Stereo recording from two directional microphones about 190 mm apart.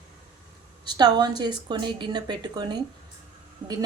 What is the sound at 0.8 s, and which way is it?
A woman's voice, 20° right (ahead or behind).